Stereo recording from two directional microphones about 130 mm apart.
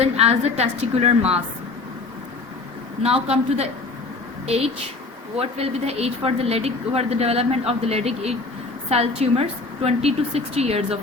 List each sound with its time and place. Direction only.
0.2 s speech: 55° right (ahead or behind)
3.0 s a woman's voice: 55° right (ahead or behind)